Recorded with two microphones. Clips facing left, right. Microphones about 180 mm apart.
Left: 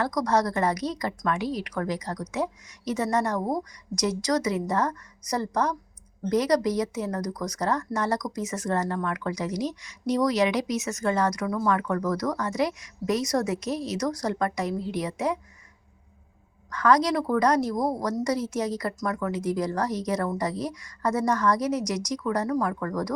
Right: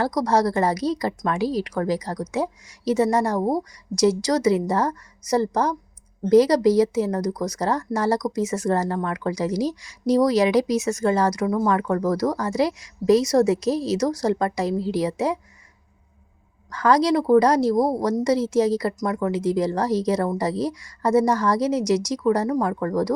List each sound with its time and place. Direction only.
0.0 s a woman's voice: 30° right (ahead or behind)
16.6 s speech: 30° right (ahead or behind)